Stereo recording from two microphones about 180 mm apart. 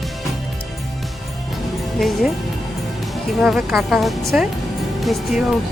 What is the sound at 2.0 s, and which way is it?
Speech, centre (ahead or behind).